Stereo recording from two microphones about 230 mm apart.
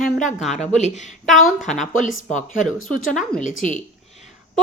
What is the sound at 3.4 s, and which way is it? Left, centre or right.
Speech, left.